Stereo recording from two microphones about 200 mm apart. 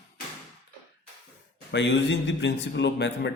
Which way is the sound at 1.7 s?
65° left (ahead or behind).